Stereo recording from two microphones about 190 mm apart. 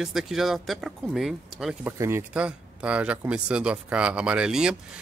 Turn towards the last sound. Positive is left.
turn(degrees=-5)  # may be behind; listen again after turning